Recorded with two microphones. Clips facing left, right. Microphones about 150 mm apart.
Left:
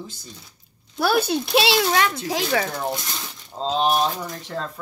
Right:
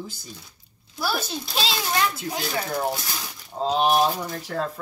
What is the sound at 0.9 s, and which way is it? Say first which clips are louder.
Speech: left 8 dB; 60° left (ahead or behind).